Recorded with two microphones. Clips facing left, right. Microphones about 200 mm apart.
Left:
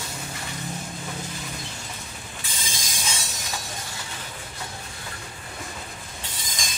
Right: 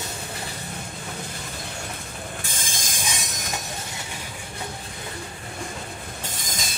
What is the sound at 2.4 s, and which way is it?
Mechanisms, 50° right (ahead or behind).